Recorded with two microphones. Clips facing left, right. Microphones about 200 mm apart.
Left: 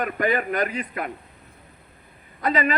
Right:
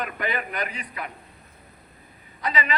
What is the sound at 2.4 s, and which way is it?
Speech, 50° left (ahead or behind).